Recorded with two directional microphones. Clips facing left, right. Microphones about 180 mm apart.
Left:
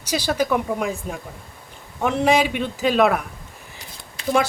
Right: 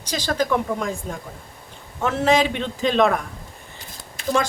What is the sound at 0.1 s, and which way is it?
Speech, 10° left (ahead or behind).